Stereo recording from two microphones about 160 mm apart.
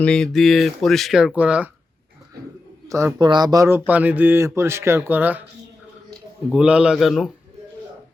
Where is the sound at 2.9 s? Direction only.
20° right (ahead or behind).